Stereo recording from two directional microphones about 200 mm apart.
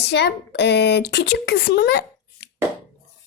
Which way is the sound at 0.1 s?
60° left (ahead or behind).